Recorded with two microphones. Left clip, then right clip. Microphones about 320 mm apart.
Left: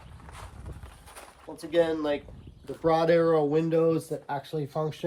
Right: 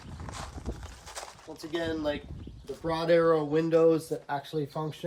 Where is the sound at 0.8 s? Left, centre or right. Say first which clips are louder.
Right 5 dB; centre.